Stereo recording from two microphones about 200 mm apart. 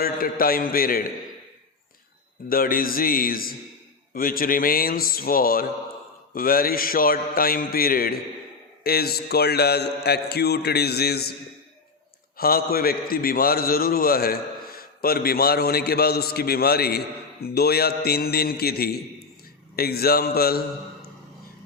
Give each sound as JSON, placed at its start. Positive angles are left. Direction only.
{"t": 0.0, "sound": "a man's voice", "side_deg": 45}
{"t": 2.5, "sound": "a man's voice", "side_deg": 45}
{"t": 12.4, "sound": "a man's voice", "side_deg": 50}